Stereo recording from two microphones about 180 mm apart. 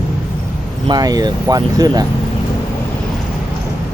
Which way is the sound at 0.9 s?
20° right (ahead or behind).